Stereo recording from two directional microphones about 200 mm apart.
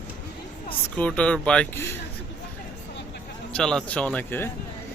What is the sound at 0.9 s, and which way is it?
Speech, 5° left (ahead or behind).